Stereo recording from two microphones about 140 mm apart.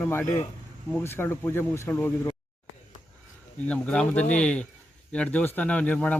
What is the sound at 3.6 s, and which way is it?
Speech, 10° left (ahead or behind).